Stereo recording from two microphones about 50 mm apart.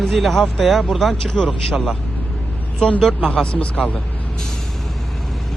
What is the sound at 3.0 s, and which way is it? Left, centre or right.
Speech, centre.